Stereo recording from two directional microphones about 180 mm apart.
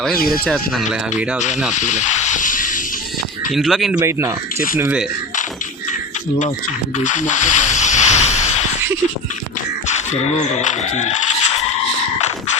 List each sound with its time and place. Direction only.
0.3 s speech: centre (ahead or behind)
1.7 s hiss: 40° left (ahead or behind)
3.5 s speech: centre (ahead or behind)
7.0 s a sound: 45° left (ahead or behind)
9.8 s speech: 40° left (ahead or behind)